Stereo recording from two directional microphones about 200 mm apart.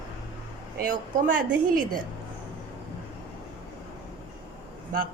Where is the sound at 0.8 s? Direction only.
45° right (ahead or behind).